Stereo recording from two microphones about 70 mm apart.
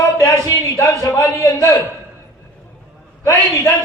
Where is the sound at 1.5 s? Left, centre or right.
Left.